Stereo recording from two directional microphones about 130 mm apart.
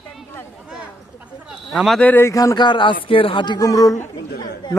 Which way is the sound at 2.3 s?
25° left (ahead or behind).